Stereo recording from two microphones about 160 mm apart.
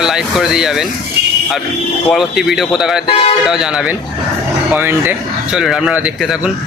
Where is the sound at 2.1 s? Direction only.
Centre (ahead or behind).